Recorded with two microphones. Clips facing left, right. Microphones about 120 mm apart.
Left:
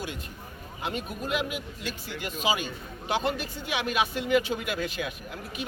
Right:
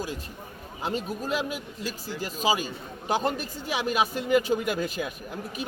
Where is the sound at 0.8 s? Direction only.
35° right (ahead or behind).